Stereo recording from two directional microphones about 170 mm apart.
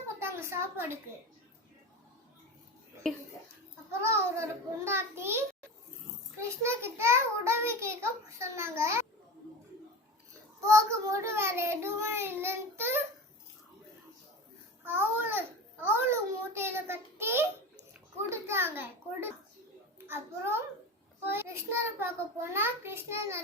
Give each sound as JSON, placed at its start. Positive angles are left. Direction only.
{"t": 0.2, "sound": "a sound", "side_deg": -15}
{"t": 3.1, "sound": "speech", "side_deg": 5}
{"t": 4.0, "sound": "a child's voice", "side_deg": -15}
{"t": 6.6, "sound": "a child's voice", "side_deg": -15}
{"t": 10.6, "sound": "a child's voice", "side_deg": -15}
{"t": 14.8, "sound": "a child's voice", "side_deg": -10}